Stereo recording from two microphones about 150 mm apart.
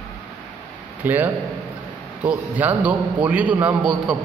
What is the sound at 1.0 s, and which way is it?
A man's voice, 10° right (ahead or behind).